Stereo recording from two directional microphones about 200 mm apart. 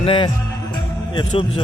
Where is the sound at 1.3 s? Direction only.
25° left (ahead or behind).